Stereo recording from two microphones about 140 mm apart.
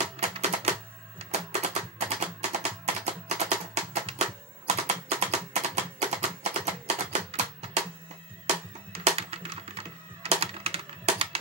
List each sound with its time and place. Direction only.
0.0 s typewriter: 50° right (ahead or behind)
1.3 s music: 50° right (ahead or behind)